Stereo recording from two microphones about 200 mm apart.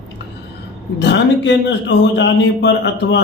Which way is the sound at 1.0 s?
60° left (ahead or behind).